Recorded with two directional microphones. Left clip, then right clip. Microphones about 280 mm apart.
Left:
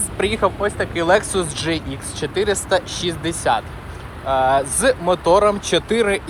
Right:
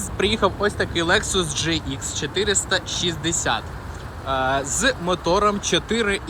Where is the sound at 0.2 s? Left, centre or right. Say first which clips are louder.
Left 1 dB; centre.